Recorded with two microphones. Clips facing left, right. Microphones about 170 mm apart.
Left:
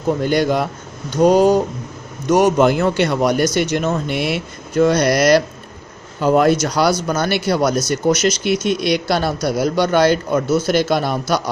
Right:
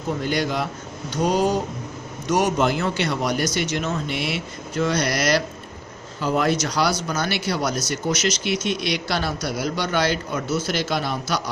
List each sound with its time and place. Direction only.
0.2 s speech: 50° left (ahead or behind)